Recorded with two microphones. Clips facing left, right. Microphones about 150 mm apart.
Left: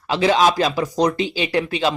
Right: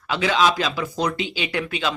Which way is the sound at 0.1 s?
35° left (ahead or behind).